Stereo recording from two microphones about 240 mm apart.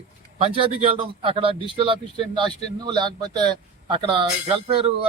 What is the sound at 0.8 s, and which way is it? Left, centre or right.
A man's voice, right.